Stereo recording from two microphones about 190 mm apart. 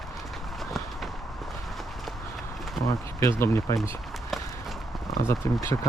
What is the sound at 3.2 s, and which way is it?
Speech, 15° left (ahead or behind).